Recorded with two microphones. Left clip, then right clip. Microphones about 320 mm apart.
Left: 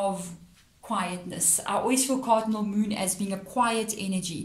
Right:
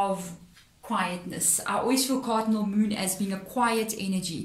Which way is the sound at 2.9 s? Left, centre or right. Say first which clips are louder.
Even; centre.